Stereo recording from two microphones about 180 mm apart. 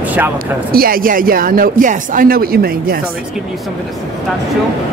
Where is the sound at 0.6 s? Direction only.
55° right (ahead or behind).